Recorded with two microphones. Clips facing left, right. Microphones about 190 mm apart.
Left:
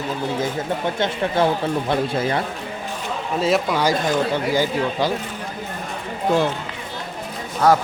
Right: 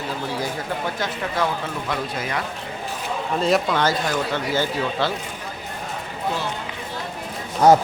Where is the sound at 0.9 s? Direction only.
25° left (ahead or behind).